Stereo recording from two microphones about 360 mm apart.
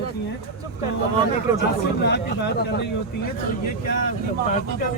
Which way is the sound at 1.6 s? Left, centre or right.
Left.